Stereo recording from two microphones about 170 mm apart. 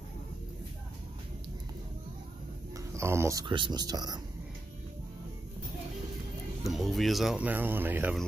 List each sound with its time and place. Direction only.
2.9 s speech: 15° right (ahead or behind)
3.4 s speech: 30° right (ahead or behind)
6.6 s speech: centre (ahead or behind)